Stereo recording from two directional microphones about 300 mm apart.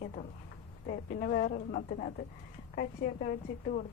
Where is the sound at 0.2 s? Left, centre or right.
Left.